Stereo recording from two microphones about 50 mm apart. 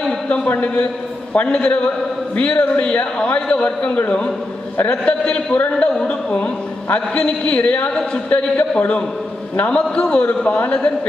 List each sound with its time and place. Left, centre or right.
0.3 s a man's voice: left